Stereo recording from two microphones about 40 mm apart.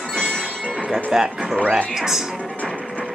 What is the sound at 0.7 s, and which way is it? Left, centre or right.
Music, centre.